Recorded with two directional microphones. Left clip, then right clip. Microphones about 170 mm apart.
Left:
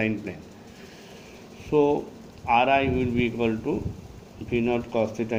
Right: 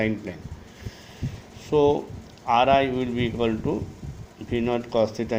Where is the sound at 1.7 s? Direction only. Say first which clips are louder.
Right 1 dB; 45° right (ahead or behind).